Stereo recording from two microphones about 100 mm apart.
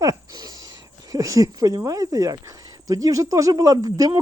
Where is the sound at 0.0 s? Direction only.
35° right (ahead or behind).